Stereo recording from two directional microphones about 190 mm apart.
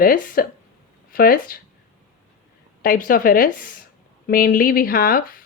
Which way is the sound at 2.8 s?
50° left (ahead or behind).